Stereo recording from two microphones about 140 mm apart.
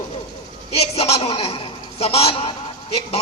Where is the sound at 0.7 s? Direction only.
45° left (ahead or behind).